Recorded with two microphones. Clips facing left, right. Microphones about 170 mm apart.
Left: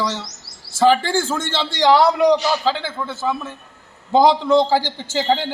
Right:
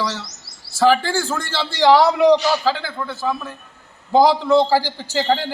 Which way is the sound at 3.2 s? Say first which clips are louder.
Left 1 dB; 5° left (ahead or behind).